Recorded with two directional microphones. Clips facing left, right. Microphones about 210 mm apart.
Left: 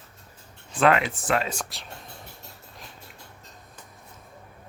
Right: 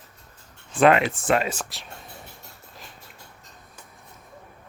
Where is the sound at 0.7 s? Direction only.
20° right (ahead or behind).